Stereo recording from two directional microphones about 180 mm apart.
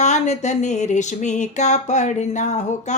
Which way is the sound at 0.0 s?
40° left (ahead or behind).